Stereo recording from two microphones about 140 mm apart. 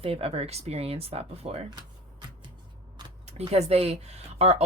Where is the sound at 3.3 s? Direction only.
50° right (ahead or behind).